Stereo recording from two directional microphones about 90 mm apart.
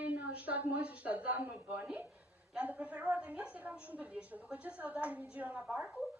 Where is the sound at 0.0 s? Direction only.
15° right (ahead or behind).